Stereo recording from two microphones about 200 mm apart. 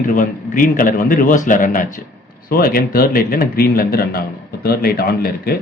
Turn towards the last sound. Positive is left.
turn(degrees=50)  # may be behind; listen again after turning